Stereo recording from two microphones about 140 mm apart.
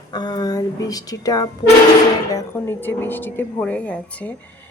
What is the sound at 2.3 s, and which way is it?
Speech, 15° left (ahead or behind).